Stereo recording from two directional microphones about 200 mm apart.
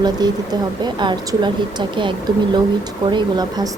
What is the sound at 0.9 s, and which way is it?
A woman's voice, 20° right (ahead or behind).